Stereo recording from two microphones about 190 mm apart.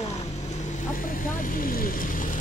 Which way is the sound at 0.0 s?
35° left (ahead or behind).